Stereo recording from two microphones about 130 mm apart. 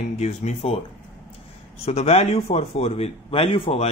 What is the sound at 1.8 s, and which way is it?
A man's voice, 55° left (ahead or behind).